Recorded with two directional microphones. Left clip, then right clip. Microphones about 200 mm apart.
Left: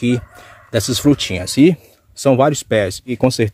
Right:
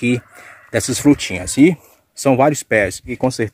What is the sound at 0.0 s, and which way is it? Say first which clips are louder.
Speech: even; centre (ahead or behind).